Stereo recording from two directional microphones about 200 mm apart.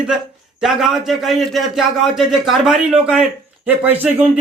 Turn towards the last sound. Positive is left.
turn(degrees=-10)  # may be behind; listen again after turning